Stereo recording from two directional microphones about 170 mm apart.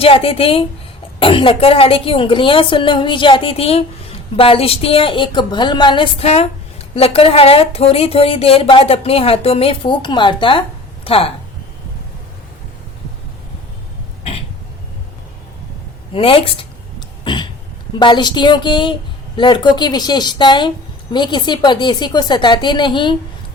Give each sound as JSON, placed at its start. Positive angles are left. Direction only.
{"t": 0.0, "sound": "a woman's voice", "side_deg": 35}
{"t": 16.1, "sound": "a woman's voice", "side_deg": 30}
{"t": 17.2, "sound": "a sound", "side_deg": 25}
{"t": 18.0, "sound": "a woman's voice", "side_deg": 25}